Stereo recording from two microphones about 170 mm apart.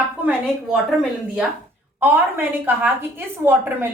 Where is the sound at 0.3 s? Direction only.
5° right (ahead or behind).